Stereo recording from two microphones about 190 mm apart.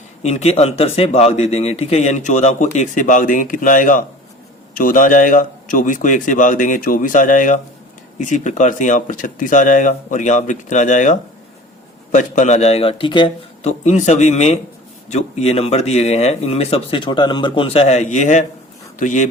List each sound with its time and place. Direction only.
0.2 s a man's voice: 35° left (ahead or behind)